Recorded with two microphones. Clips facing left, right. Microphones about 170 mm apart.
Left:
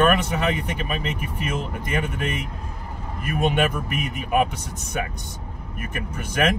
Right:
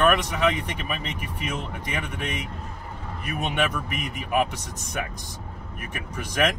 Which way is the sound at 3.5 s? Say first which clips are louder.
Left 3 dB; centre (ahead or behind).